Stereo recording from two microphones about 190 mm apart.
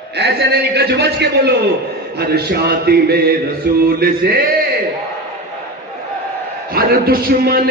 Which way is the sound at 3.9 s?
55° right (ahead or behind).